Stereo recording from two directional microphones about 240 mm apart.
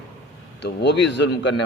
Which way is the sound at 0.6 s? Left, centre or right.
Left.